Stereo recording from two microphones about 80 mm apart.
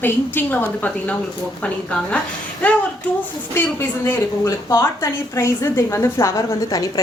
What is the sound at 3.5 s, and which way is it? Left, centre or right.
A woman's voice, left.